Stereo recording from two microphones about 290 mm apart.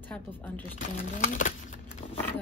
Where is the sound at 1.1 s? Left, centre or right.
Left.